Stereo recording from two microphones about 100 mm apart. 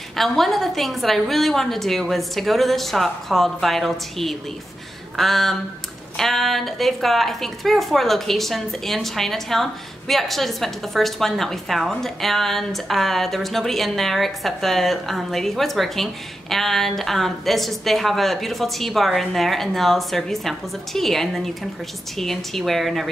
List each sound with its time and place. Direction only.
0.1 s speech: centre (ahead or behind)